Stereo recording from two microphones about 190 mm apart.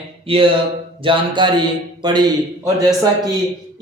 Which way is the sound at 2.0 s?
20° right (ahead or behind).